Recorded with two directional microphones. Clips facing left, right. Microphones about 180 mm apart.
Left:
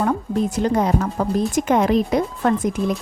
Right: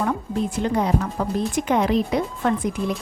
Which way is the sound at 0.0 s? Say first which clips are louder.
Left 3 dB; 40° left (ahead or behind).